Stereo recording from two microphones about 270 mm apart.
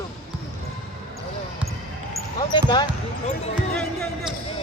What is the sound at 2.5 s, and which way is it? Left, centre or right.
Speech, centre.